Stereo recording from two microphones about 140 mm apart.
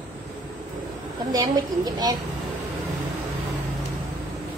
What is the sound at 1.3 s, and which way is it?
Speech, 25° right (ahead or behind).